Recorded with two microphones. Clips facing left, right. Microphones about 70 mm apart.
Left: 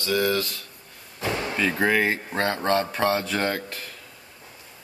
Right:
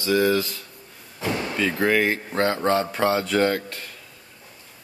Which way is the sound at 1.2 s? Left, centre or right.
Centre.